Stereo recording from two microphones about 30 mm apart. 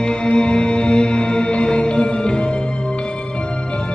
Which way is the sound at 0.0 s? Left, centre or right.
Left.